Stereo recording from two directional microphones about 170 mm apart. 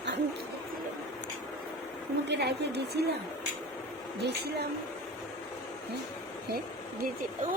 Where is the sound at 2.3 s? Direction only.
75° right (ahead or behind).